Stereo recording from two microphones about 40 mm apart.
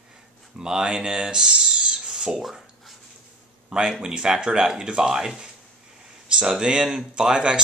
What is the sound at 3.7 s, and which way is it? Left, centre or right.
Speech, centre.